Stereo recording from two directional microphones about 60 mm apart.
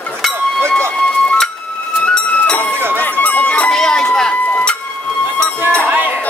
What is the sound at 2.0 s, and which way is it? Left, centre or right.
Music, centre.